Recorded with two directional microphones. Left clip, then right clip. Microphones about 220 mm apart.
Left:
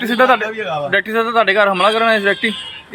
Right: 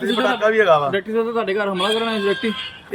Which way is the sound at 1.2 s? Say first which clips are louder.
Left 9 dB; centre (ahead or behind).